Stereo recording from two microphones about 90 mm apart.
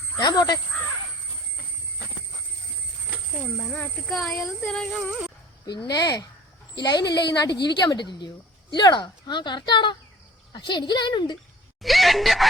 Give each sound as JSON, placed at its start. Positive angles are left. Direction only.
{"t": 0.2, "sound": "a woman's voice", "side_deg": 50}
{"t": 4.0, "sound": "speech", "side_deg": 5}
{"t": 5.6, "sound": "a woman's voice", "side_deg": 55}
{"t": 11.8, "sound": "speech", "side_deg": 0}